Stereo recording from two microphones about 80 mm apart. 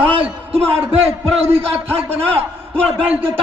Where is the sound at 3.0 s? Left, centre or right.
Right.